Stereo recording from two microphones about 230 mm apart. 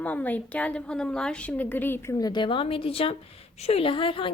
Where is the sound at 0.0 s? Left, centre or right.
Centre.